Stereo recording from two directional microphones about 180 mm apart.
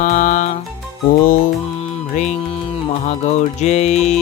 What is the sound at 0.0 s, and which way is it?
Music, 45° left (ahead or behind).